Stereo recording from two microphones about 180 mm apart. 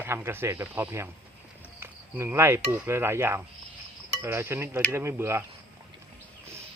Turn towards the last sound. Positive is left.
turn(degrees=-15)  # may be behind; listen again after turning